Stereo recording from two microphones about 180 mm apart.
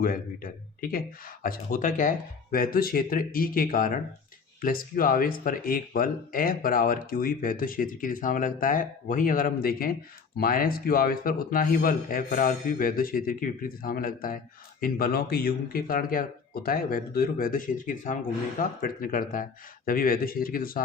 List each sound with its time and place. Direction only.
0.0 s speech: 50° left (ahead or behind)